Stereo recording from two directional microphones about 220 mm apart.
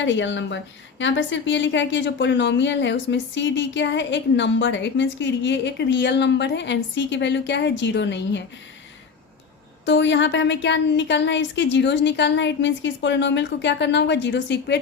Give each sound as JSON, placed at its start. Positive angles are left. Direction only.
{"t": 0.0, "sound": "a woman's voice", "side_deg": 55}
{"t": 9.8, "sound": "a woman's voice", "side_deg": 55}